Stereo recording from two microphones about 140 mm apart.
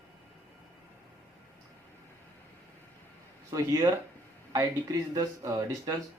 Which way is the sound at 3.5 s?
25° right (ahead or behind).